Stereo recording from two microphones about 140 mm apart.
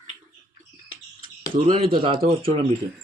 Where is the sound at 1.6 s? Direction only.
40° right (ahead or behind).